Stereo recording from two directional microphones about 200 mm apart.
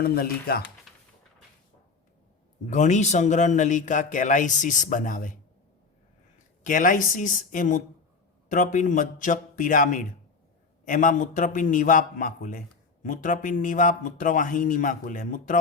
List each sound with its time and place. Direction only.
0.0 s speech: 50° left (ahead or behind)
2.6 s a man's voice: 35° left (ahead or behind)
6.7 s a man's voice: 40° left (ahead or behind)